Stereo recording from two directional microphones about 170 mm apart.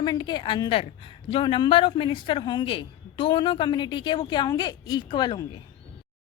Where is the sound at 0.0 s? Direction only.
25° left (ahead or behind).